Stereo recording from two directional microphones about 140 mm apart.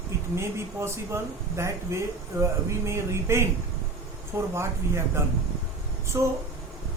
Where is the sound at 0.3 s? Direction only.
20° right (ahead or behind).